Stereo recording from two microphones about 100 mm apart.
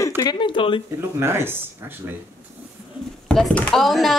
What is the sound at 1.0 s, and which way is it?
Speech, 25° right (ahead or behind).